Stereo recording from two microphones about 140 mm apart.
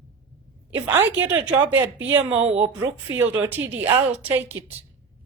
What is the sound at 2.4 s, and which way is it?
Speech, 50° right (ahead or behind).